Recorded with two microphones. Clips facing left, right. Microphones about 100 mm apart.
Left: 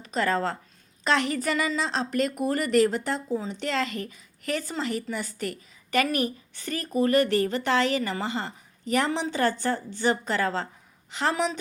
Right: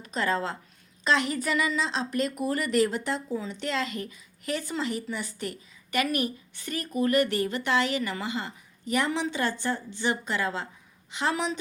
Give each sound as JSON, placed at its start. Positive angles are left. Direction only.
{"t": 0.1, "sound": "a woman's voice", "side_deg": 45}